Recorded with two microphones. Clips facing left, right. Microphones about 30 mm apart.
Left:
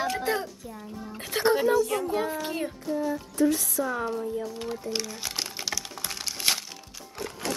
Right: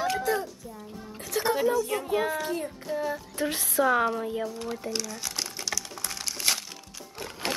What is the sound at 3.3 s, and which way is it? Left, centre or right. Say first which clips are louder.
Speech: left 3 dB; right.